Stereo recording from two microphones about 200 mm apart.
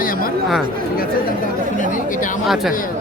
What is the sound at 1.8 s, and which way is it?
Speech, 40° left (ahead or behind).